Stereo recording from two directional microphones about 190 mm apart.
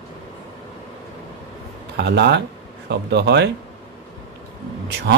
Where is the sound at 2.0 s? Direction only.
65° right (ahead or behind).